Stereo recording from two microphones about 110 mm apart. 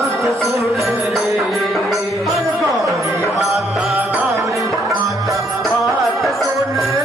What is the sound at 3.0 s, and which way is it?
Music, 25° right (ahead or behind).